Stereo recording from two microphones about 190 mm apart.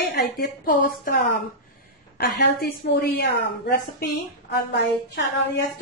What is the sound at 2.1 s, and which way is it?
A woman's voice, 60° left (ahead or behind).